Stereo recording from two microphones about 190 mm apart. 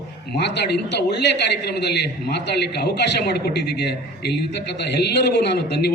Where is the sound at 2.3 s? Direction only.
60° left (ahead or behind).